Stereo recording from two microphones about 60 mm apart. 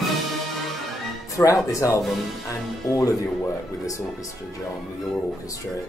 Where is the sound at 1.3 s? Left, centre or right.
Left.